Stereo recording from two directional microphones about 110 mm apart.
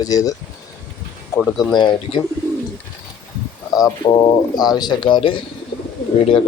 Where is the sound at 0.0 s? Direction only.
35° left (ahead or behind).